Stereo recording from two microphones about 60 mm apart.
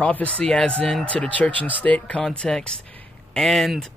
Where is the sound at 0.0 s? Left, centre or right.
Left.